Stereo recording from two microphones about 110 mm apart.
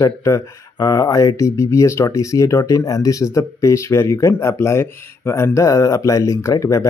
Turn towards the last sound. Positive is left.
turn(degrees=30)  # may be behind; listen again after turning